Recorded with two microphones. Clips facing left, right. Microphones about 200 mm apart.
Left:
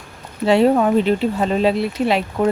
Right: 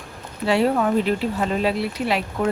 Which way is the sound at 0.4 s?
25° left (ahead or behind).